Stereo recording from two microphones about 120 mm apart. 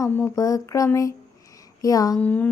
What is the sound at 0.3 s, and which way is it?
Music, 30° left (ahead or behind).